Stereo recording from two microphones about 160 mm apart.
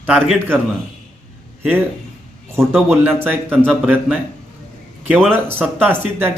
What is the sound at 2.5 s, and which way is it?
A man's voice, 15° right (ahead or behind).